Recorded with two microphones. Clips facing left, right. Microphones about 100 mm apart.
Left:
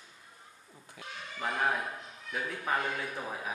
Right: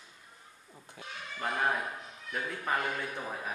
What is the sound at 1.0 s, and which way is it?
Speech, 35° right (ahead or behind).